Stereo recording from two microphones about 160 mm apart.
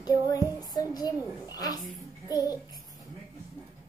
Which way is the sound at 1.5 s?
25° left (ahead or behind).